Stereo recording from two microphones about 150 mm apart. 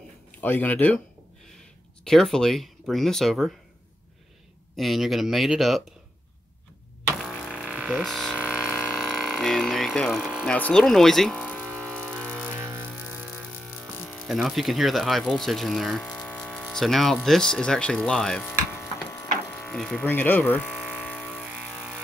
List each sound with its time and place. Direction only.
0.4 s speech: 10° left (ahead or behind)
2.0 s speech: 5° left (ahead or behind)
4.7 s speech: centre (ahead or behind)
7.2 s a sound: centre (ahead or behind)
12.2 s music: 5° left (ahead or behind)
12.6 s music: 15° right (ahead or behind)
14.0 s speech: centre (ahead or behind)
18.7 s electric shaver: 15° left (ahead or behind)
19.7 s speech: centre (ahead or behind)
20.0 s speech: 10° left (ahead or behind)
20.6 s electric shaver: 5° right (ahead or behind)
21.2 s ratchet: 5° right (ahead or behind)
21.5 s vehicle: 5° right (ahead or behind)